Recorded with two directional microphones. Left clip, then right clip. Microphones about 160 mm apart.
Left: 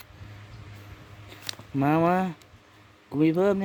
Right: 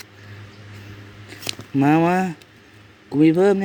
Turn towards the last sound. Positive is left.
turn(degrees=15)  # may be behind; listen again after turning